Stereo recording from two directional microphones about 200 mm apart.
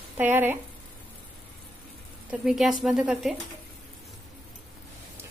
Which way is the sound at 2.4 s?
Centre (ahead or behind).